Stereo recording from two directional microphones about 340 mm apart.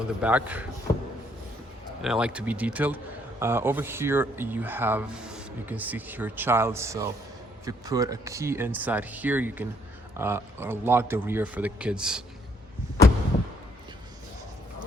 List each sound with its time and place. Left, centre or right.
0.2 s speech: centre
2.0 s speech: centre